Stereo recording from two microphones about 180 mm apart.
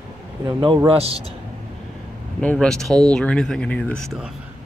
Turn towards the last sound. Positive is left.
turn(degrees=10)  # may be behind; listen again after turning